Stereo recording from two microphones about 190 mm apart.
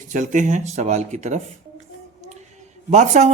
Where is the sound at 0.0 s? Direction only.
40° right (ahead or behind).